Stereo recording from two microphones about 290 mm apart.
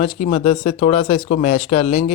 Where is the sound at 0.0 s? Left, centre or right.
Left.